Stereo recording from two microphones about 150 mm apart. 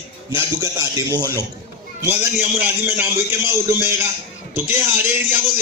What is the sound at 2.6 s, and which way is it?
A man's voice, 10° right (ahead or behind).